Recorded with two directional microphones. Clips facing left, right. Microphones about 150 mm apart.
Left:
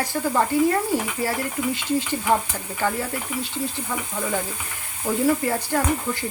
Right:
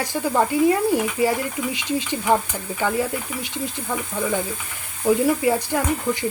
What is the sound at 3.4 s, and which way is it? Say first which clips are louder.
Speech: left 1 dB; 15° right (ahead or behind).